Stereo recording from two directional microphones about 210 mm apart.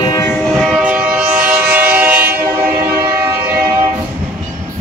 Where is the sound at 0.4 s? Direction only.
Centre (ahead or behind).